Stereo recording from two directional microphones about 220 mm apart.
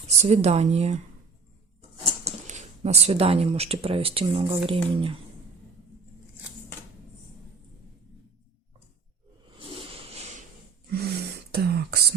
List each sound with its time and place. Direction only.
0.2 s speech: 30° right (ahead or behind)
2.2 s speech: 30° right (ahead or behind)
9.6 s a sound: 25° right (ahead or behind)
10.9 s throat clearing: 45° right (ahead or behind)